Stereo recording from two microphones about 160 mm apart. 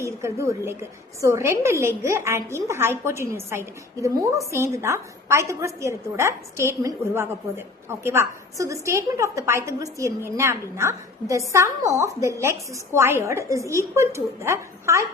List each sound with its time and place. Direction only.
0.0 s a woman's voice: 20° right (ahead or behind)